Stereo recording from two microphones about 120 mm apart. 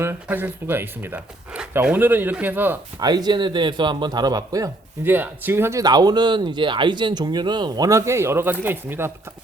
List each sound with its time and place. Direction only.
0.0 s speech: 20° right (ahead or behind)
3.0 s speech: 35° right (ahead or behind)
5.0 s speech: 15° right (ahead or behind)
5.8 s speech: 35° right (ahead or behind); by 9.1 s 20° right (ahead or behind)